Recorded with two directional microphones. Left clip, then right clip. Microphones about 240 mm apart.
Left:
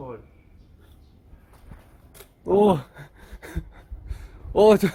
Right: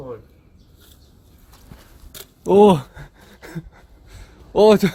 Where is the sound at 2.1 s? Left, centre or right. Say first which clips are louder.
Right 6 dB; right.